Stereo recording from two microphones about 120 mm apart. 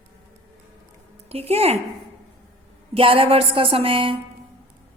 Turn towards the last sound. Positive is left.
turn(degrees=-45)  # may be behind; listen again after turning